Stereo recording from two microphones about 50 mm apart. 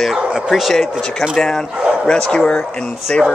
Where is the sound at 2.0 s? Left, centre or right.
Centre.